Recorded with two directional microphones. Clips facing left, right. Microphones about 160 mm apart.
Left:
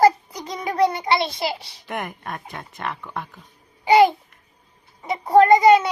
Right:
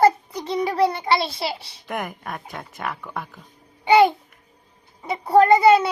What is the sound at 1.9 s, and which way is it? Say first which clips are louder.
Speech: right 1 dB; centre (ahead or behind).